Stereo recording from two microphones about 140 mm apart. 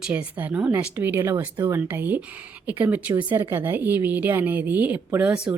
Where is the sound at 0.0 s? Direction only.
10° right (ahead or behind).